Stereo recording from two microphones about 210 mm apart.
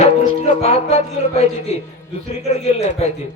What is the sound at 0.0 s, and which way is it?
Music, 35° left (ahead or behind).